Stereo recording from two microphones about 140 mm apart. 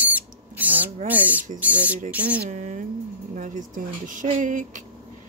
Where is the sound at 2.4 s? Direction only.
60° right (ahead or behind).